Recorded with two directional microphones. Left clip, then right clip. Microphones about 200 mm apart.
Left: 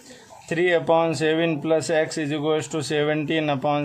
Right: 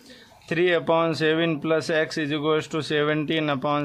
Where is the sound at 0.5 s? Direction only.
25° right (ahead or behind).